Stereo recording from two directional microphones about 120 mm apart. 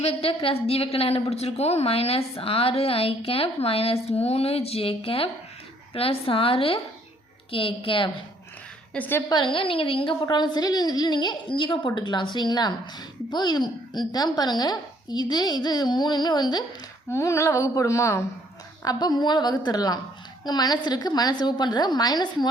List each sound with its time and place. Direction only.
0.0 s a woman's voice: 55° left (ahead or behind)
8.9 s a woman's voice: 15° left (ahead or behind)
9.3 s a woman's voice: 45° left (ahead or behind)
17.1 s a woman's voice: 25° left (ahead or behind)
18.9 s a woman's voice: 35° left (ahead or behind)